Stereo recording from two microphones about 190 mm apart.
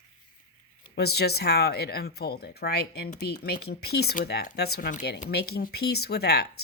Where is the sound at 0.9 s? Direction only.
60° left (ahead or behind).